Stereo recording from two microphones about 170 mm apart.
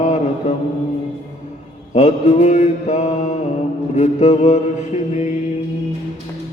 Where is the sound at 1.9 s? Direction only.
40° left (ahead or behind).